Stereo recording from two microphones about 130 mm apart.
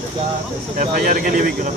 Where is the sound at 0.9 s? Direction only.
90° right.